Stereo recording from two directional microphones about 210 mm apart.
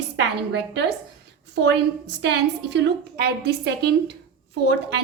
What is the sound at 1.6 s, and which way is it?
A woman's voice, 55° right (ahead or behind).